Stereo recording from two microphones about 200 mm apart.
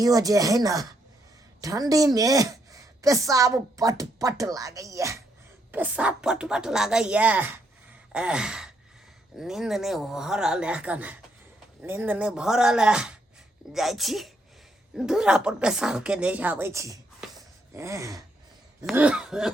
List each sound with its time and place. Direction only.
0.0 s a woman's voice: 15° right (ahead or behind)
8.1 s gasp: 5° right (ahead or behind)
9.3 s a woman's voice: centre (ahead or behind)
17.3 s a sound: 15° right (ahead or behind)
18.9 s a woman's voice: 5° right (ahead or behind)